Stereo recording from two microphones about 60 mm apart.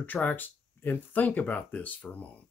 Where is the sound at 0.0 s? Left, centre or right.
Left.